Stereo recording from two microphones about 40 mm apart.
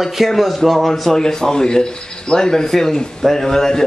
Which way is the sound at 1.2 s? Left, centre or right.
Centre.